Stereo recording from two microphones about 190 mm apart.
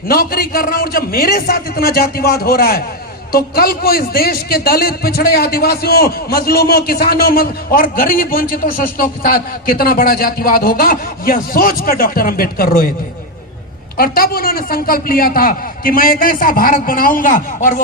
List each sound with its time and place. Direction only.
0.1 s a man's voice: 50° left (ahead or behind)
13.9 s a man's voice: 50° left (ahead or behind)